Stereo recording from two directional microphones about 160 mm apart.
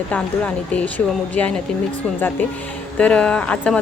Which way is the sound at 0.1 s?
10° left (ahead or behind).